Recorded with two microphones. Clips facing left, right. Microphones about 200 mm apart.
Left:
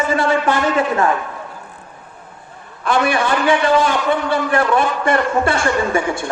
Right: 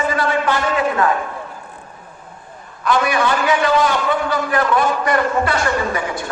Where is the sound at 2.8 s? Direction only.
30° left (ahead or behind).